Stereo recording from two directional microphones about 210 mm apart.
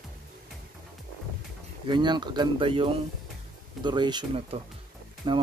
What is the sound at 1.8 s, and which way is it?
Speech, 20° right (ahead or behind).